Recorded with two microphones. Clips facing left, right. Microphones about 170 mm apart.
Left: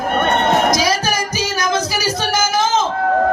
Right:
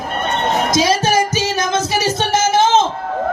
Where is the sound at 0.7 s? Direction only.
25° right (ahead or behind).